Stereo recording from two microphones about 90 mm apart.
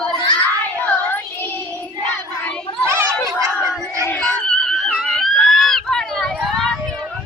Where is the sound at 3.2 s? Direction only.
40° right (ahead or behind).